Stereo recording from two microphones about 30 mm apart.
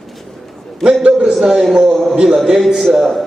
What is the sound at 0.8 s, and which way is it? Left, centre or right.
Speech, right.